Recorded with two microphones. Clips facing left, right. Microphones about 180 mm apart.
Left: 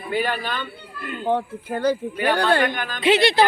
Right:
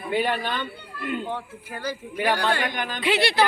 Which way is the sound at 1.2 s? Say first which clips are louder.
Left 9 dB; 55° left (ahead or behind).